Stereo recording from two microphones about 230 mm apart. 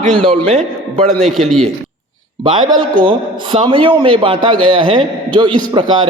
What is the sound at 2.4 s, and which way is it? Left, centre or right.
A man's voice, centre.